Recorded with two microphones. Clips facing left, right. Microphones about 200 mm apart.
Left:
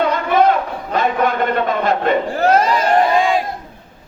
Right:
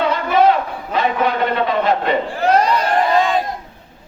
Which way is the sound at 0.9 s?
50° left (ahead or behind).